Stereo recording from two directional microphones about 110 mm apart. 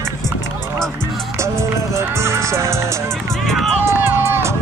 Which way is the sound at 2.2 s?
25° right (ahead or behind).